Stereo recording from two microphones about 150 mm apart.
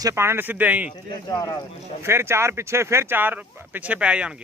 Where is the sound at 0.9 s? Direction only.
25° left (ahead or behind).